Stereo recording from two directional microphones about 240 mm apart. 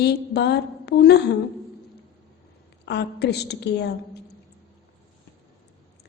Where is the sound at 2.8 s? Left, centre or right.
Left.